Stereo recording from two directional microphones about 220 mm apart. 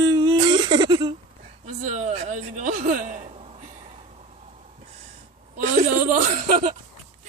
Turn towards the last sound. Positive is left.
turn(degrees=-40)  # may be behind; listen again after turning